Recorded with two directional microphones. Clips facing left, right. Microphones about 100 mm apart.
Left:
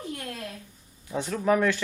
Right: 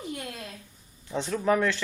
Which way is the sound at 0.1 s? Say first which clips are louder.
Left 1 dB; 15° right (ahead or behind).